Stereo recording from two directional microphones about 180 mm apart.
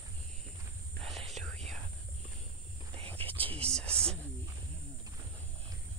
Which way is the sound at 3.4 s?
30° right (ahead or behind).